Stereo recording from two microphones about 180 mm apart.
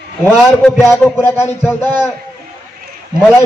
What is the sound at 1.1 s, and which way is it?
Speech, 15° left (ahead or behind).